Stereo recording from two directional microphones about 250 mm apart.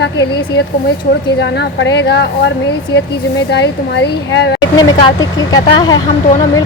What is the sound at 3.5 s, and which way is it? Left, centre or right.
A woman's voice, left.